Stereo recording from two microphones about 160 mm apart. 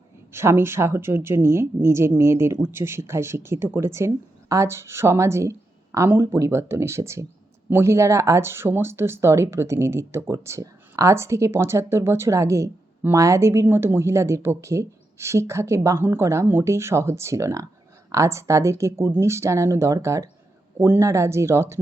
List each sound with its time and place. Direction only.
0.3 s speech: 15° right (ahead or behind)